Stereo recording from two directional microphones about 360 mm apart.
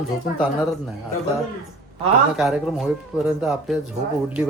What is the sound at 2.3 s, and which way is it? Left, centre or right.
Speech, centre.